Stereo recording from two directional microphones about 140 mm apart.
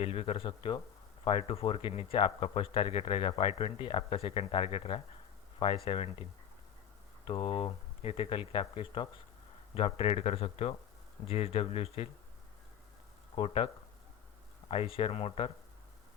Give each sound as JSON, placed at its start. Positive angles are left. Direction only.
{"t": 0.0, "sound": "speech", "side_deg": 45}
{"t": 7.3, "sound": "speech", "side_deg": 40}
{"t": 13.3, "sound": "speech", "side_deg": 40}
{"t": 14.7, "sound": "speech", "side_deg": 45}